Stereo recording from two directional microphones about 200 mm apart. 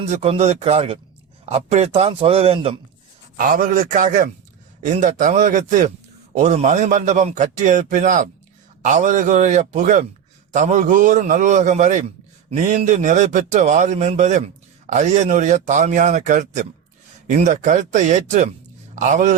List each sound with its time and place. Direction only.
0.1 s a man's voice: 35° right (ahead or behind)
3.3 s a man's voice: 45° right (ahead or behind)